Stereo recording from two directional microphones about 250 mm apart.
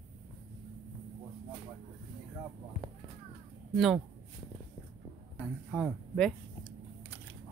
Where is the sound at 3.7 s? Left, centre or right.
Centre.